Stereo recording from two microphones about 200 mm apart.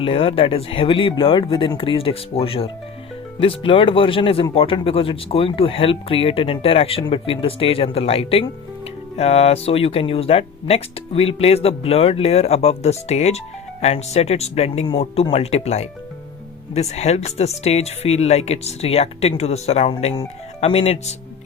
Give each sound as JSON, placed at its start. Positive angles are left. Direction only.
{"t": 0.0, "sound": "speech", "side_deg": 25}